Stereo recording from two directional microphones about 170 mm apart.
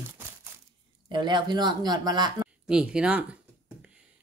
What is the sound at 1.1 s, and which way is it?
Speech, 25° right (ahead or behind).